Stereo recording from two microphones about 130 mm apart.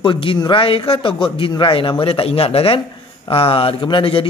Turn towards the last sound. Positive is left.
turn(degrees=45)  # may be behind; listen again after turning